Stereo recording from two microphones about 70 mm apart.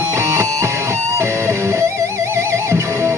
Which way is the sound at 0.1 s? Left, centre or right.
Right.